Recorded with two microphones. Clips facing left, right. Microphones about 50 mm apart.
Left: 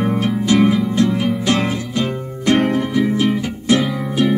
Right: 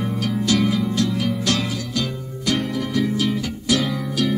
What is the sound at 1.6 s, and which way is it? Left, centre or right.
Music, left.